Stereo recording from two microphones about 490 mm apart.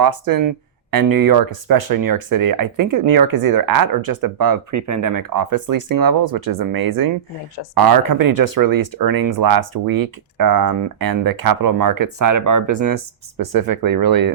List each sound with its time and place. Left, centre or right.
0.0 s speech: right